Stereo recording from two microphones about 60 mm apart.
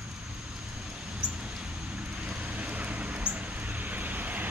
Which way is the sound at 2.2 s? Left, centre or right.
Right.